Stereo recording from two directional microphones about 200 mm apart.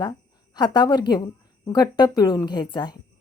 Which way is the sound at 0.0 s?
20° left (ahead or behind).